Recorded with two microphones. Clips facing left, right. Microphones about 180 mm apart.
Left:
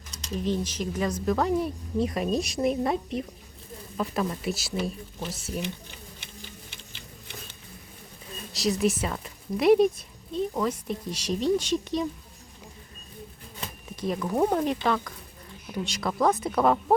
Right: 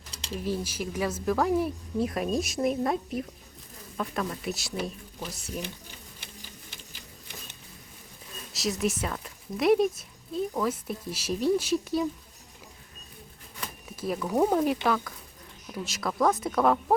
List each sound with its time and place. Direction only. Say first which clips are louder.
0.1 s a sound: left 1 dB; 30° right (ahead or behind)
0.4 s speech: left 3 dB; 10° right (ahead or behind)
8.5 s speech: left 4 dB; centre (ahead or behind)
13.9 s speech: even; 5° right (ahead or behind)